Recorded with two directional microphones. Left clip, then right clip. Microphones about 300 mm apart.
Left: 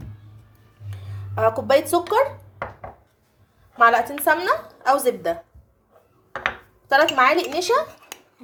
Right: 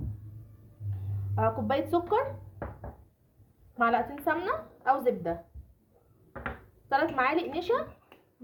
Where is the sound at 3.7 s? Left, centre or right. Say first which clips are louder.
Left 10 dB; left.